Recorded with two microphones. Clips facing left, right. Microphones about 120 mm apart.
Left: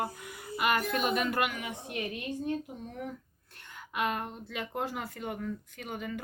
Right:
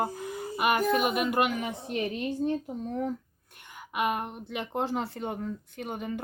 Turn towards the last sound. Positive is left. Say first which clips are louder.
# right 4 dB
turn(degrees=-25)  # may be behind; listen again after turning